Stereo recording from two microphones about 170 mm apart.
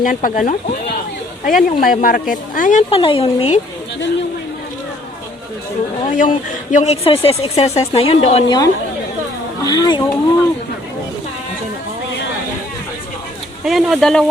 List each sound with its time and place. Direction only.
0.0 s speech: 50° left (ahead or behind)
2.9 s speech: 35° left (ahead or behind)
6.1 s speech: 50° left (ahead or behind)
8.4 s speech: 25° left (ahead or behind)
13.7 s speech: centre (ahead or behind)